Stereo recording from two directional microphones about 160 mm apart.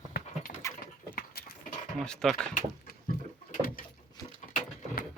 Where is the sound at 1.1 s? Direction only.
75° left (ahead or behind).